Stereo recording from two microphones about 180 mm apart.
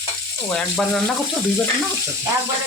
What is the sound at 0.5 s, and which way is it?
Speech, 5° left (ahead or behind).